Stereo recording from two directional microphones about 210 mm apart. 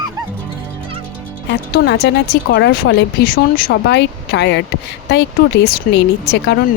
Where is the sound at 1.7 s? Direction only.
55° left (ahead or behind).